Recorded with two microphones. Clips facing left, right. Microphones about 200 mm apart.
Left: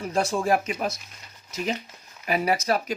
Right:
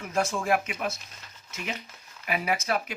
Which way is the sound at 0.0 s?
35° left (ahead or behind).